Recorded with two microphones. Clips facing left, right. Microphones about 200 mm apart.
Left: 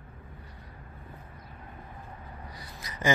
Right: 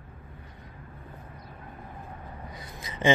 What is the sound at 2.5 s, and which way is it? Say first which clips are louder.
Gasp: right 3 dB; 25° right (ahead or behind).